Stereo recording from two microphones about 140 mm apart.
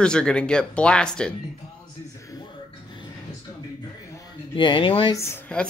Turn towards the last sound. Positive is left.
turn(degrees=20)  # may be behind; listen again after turning